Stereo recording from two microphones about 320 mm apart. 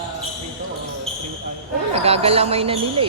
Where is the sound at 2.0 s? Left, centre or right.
Centre.